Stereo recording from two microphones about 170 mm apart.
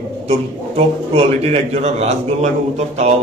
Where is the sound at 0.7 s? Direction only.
35° right (ahead or behind).